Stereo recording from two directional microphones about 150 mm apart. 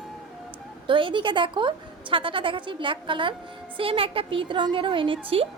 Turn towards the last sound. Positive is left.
turn(degrees=-35)  # may be behind; listen again after turning